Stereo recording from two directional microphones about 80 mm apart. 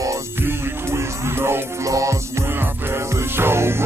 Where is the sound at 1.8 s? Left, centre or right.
Right.